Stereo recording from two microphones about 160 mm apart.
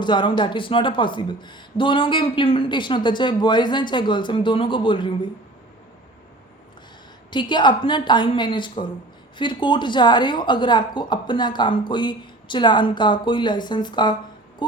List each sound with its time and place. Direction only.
0.0 s speech: 30° left (ahead or behind)
7.3 s speech: 30° left (ahead or behind)